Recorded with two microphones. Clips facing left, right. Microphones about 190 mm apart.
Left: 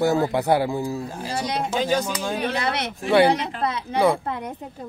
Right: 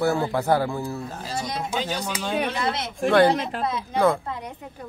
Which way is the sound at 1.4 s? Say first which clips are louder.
Left 7 dB; 75° left (ahead or behind).